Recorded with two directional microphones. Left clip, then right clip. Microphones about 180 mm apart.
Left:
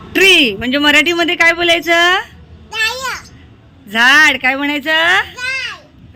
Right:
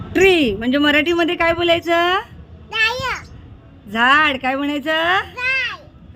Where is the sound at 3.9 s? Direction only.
Centre (ahead or behind).